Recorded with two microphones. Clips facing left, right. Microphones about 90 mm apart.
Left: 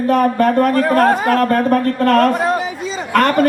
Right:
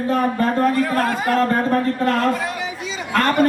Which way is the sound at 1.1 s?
50° left (ahead or behind).